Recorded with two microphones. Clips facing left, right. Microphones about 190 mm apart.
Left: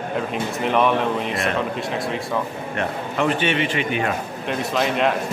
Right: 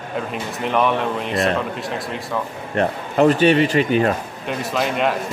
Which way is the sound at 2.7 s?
40° right (ahead or behind).